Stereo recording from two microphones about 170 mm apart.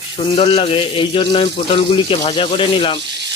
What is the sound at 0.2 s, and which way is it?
Speech, 35° left (ahead or behind).